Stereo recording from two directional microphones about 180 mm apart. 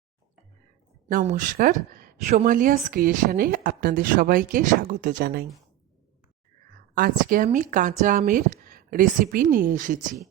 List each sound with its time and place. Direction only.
1.0 s speech: 40° right (ahead or behind)
1.9 s a sound: 50° right (ahead or behind)
2.3 s speech: 40° right (ahead or behind)
6.9 s speech: 55° right (ahead or behind)